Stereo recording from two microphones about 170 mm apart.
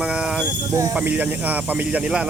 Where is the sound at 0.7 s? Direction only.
20° right (ahead or behind).